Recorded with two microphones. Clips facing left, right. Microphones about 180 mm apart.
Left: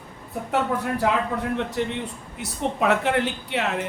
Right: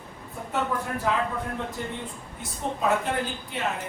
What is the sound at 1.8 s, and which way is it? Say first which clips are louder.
A man's voice: left 7 dB; 80° left.